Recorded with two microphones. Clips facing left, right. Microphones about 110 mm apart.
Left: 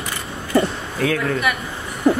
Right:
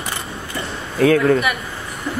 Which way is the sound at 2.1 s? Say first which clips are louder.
Left 9 dB; 55° left (ahead or behind).